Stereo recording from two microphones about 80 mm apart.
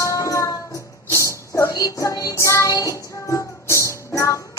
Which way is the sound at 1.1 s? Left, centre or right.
Left.